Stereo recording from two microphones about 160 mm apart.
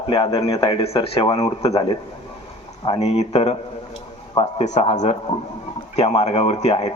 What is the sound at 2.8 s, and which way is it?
A man's voice, 40° left (ahead or behind).